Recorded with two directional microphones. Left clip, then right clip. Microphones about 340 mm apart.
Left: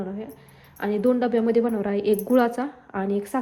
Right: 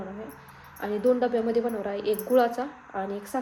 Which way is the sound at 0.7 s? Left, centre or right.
Centre.